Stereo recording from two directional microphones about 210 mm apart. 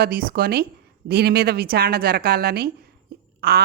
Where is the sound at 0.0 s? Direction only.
45° right (ahead or behind).